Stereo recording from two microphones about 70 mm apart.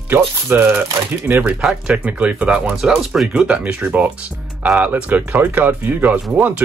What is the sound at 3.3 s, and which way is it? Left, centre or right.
Speech, centre.